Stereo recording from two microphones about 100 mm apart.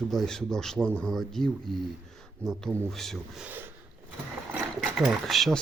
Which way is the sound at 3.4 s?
20° right (ahead or behind).